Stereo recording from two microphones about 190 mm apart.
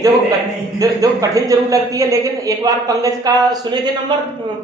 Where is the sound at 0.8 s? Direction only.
20° right (ahead or behind).